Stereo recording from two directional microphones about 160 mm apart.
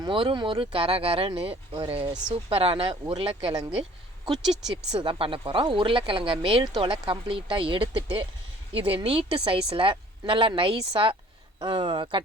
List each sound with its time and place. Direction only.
0.0 s speech: 30° right (ahead or behind)
4.4 s speech: centre (ahead or behind)
4.9 s speech: 30° right (ahead or behind)